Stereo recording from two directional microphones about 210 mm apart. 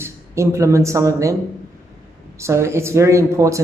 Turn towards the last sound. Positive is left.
turn(degrees=-15)  # may be behind; listen again after turning